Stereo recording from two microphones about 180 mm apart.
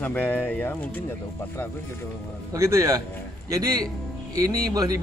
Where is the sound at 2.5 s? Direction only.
15° right (ahead or behind).